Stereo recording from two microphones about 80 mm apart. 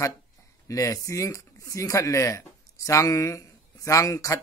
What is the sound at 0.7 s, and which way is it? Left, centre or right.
Speech, left.